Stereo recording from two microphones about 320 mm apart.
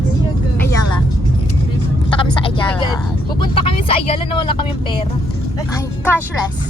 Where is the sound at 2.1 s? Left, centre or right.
Centre.